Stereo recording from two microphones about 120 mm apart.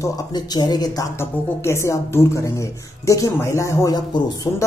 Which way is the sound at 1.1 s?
20° left (ahead or behind).